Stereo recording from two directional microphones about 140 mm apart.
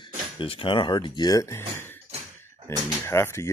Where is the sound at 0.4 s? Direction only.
40° left (ahead or behind).